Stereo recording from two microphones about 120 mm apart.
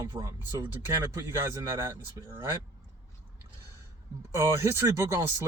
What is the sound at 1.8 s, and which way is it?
Speech, 20° right (ahead or behind).